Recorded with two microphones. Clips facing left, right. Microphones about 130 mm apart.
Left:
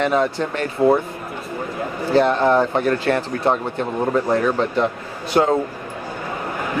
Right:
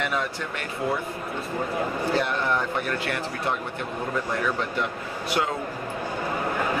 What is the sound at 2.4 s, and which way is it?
Speech, 55° left (ahead or behind).